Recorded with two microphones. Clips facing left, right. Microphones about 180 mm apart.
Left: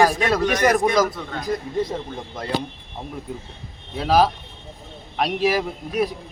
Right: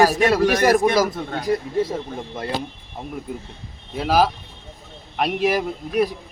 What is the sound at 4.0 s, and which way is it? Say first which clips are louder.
A man's voice: left 1 dB; centre (ahead or behind).